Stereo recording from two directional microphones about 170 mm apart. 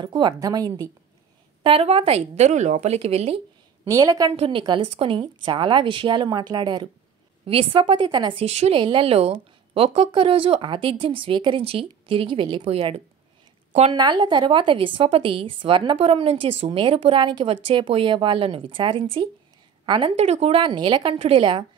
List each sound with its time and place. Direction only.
0.0 s speech: 25° right (ahead or behind)
1.6 s a woman's voice: 35° right (ahead or behind)
3.8 s a woman's voice: 20° right (ahead or behind); by 13.0 s 35° right (ahead or behind)
13.9 s a woman's voice: 25° right (ahead or behind)